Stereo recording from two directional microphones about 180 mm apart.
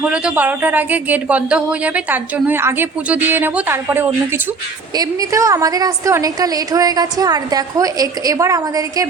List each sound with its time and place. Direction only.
0.0 s a woman's voice: 5° right (ahead or behind)